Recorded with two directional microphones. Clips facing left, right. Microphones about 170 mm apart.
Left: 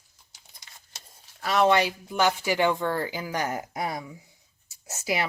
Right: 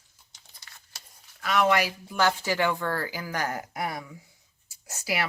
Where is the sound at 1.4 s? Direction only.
30° left (ahead or behind).